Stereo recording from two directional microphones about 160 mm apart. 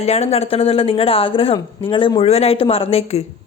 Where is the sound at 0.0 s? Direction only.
45° left (ahead or behind).